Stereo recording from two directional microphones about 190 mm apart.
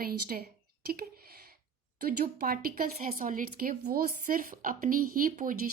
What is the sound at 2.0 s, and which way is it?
Speech, 55° right (ahead or behind).